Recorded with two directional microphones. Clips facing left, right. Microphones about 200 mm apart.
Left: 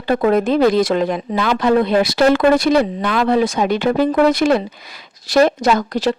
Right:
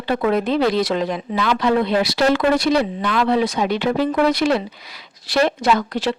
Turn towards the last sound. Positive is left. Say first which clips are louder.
# left 3 dB
turn(degrees=40)  # may be behind; listen again after turning